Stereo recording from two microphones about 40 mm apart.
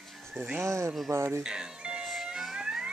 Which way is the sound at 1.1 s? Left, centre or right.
Right.